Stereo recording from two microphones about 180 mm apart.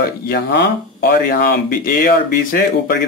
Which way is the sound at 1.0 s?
55° left (ahead or behind).